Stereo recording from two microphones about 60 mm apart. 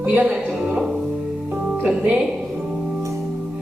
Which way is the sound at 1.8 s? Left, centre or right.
Centre.